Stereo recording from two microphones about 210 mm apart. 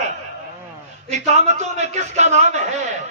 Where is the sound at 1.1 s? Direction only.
35° right (ahead or behind).